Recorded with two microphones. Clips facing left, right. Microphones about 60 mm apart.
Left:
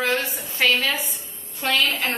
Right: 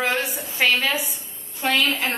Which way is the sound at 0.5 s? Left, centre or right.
Centre.